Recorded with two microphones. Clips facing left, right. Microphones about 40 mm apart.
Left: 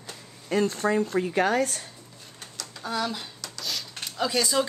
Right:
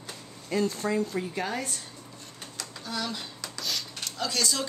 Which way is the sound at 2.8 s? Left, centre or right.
Centre.